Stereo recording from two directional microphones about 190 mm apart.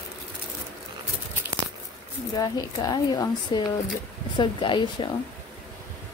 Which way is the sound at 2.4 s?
20° left (ahead or behind).